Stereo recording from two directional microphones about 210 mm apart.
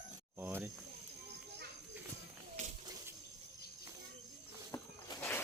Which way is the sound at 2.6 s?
35° right (ahead or behind).